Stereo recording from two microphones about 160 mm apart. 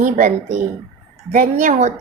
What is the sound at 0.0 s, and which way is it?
A woman's voice, 50° right (ahead or behind).